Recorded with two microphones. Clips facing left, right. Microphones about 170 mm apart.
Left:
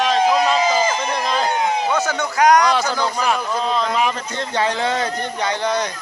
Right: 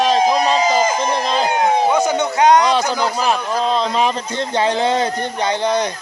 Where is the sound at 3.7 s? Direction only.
30° right (ahead or behind).